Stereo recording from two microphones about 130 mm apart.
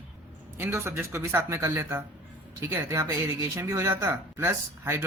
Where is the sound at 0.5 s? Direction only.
20° right (ahead or behind).